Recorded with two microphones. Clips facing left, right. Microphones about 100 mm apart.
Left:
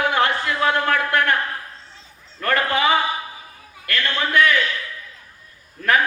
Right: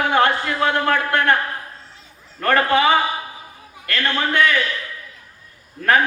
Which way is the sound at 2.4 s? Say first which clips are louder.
Right 4 dB; 35° right (ahead or behind).